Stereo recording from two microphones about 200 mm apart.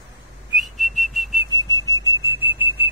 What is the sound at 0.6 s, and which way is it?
Whistling, centre (ahead or behind).